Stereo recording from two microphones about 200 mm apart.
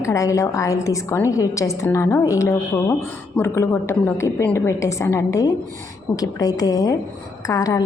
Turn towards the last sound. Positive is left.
turn(degrees=15)  # may be behind; listen again after turning